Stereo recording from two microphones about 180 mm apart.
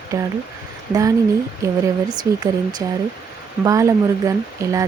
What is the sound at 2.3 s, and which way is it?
Speech, 15° right (ahead or behind).